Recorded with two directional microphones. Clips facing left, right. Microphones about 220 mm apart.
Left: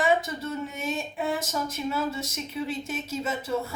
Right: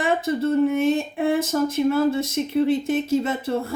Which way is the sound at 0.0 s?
55° right (ahead or behind).